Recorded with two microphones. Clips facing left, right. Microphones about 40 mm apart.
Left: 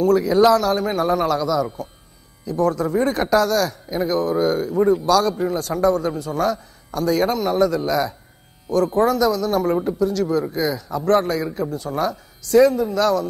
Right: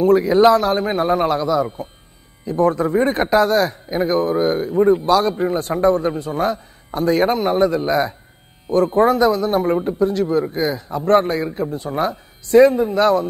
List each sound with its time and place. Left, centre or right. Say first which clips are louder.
0.0 s a man's voice: right 2 dB; right